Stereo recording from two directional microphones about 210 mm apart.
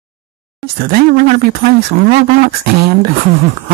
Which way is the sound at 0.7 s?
45° right (ahead or behind).